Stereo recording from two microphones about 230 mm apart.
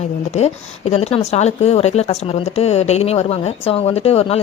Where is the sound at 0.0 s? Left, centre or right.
Left.